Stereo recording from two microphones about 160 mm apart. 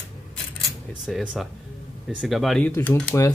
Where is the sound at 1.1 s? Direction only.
5° right (ahead or behind).